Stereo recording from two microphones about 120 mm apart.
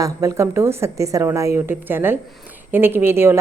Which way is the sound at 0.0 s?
25° right (ahead or behind).